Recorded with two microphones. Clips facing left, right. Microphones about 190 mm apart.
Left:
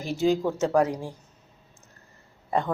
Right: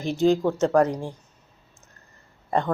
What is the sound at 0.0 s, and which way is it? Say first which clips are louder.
Speech: right 3 dB; 5° left (ahead or behind).